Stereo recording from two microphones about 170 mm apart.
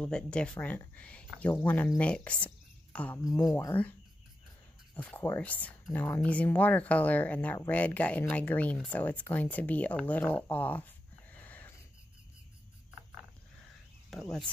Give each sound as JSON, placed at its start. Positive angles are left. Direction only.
{"t": 0.0, "sound": "speech", "side_deg": 5}
{"t": 3.3, "sound": "speech", "side_deg": 20}
{"t": 4.9, "sound": "speech", "side_deg": 15}
{"t": 11.3, "sound": "a sound", "side_deg": 10}
{"t": 14.1, "sound": "speech", "side_deg": 0}